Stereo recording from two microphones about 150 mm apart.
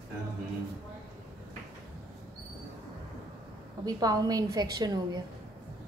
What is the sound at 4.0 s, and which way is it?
A woman's voice, 25° right (ahead or behind).